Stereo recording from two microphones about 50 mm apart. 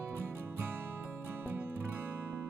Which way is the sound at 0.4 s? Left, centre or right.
Right.